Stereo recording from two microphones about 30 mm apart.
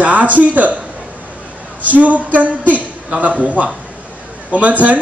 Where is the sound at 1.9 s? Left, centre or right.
Right.